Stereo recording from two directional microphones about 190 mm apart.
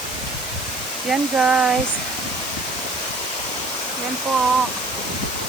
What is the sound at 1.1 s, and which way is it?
Speech, 5° right (ahead or behind).